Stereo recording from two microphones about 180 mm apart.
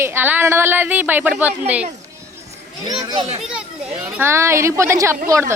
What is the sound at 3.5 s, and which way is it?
A woman's voice, 5° right (ahead or behind).